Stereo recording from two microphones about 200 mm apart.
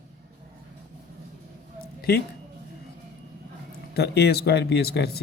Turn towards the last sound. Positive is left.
turn(degrees=55)  # may be behind; listen again after turning